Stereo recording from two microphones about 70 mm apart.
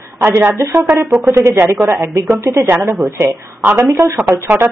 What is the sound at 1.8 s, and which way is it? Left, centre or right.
Speech, right.